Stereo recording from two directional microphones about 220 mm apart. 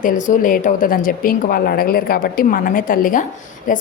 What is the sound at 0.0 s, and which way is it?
Speech, 35° left (ahead or behind).